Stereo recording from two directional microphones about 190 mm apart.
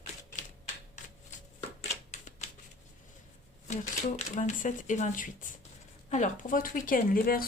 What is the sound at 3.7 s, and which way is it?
Speech, 40° left (ahead or behind).